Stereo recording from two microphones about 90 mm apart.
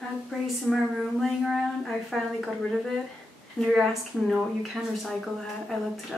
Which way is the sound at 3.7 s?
5° right (ahead or behind).